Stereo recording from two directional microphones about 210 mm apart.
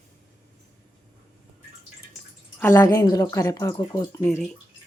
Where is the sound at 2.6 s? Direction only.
10° left (ahead or behind).